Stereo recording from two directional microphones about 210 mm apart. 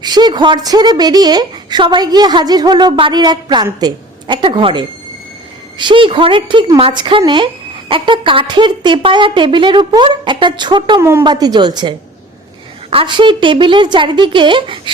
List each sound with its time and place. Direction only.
0.0 s a woman's voice: 20° right (ahead or behind)